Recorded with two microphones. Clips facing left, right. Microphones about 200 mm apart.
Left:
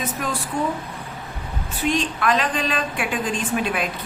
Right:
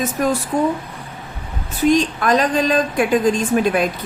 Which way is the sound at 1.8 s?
40° right (ahead or behind).